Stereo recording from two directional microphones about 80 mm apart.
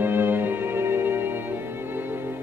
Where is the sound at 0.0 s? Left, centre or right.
Right.